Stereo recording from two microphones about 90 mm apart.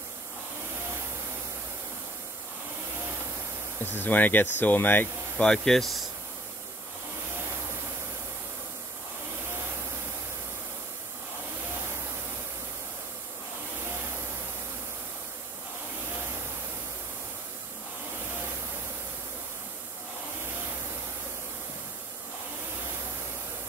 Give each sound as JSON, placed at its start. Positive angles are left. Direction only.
{"t": 3.8, "sound": "speech", "side_deg": 20}
{"t": 5.4, "sound": "speech", "side_deg": 5}